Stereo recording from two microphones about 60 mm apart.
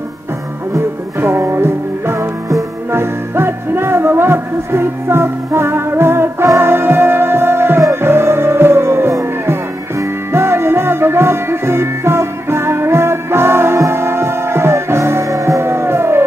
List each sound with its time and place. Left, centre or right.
1.2 s music: right